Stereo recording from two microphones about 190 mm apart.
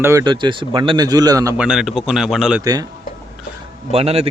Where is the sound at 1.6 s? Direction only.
5° right (ahead or behind).